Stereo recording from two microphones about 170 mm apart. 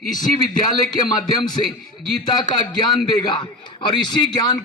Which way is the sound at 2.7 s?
25° left (ahead or behind).